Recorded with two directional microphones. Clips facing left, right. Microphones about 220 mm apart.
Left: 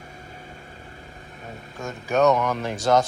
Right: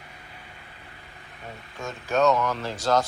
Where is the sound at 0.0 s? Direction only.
45° left (ahead or behind).